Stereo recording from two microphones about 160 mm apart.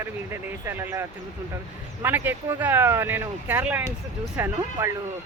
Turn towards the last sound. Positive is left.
turn(degrees=-15)  # may be behind; listen again after turning